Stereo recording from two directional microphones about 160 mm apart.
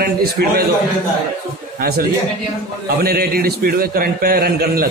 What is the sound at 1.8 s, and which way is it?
A man's voice, 75° right (ahead or behind).